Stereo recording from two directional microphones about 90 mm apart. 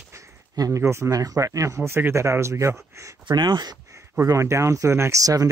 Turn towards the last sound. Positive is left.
turn(degrees=-40)  # may be behind; listen again after turning